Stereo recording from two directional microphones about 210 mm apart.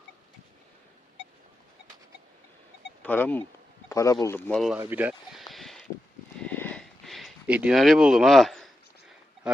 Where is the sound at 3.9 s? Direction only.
15° left (ahead or behind).